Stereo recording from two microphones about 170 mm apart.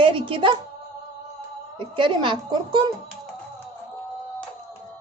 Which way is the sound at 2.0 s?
30° right (ahead or behind).